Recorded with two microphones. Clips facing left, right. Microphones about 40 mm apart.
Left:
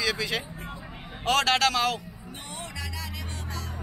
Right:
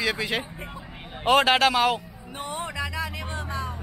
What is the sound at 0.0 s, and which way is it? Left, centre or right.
A man's voice, centre.